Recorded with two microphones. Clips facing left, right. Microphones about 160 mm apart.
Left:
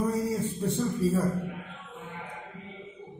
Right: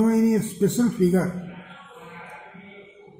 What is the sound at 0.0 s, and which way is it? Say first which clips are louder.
A man's voice: right 9 dB; 75° right (ahead or behind).